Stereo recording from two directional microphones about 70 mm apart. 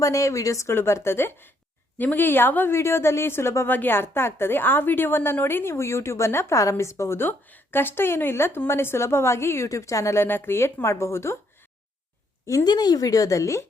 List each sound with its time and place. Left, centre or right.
0.0 s speech: left
0.7 s a woman's voice: left
3.7 s a woman's voice: left
9.6 s speech: left
10.2 s a woman's voice: left
12.6 s speech: left